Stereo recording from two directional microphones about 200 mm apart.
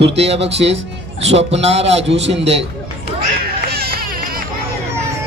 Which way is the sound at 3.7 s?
50° right (ahead or behind).